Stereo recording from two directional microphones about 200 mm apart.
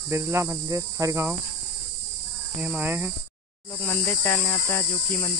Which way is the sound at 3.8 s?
15° left (ahead or behind).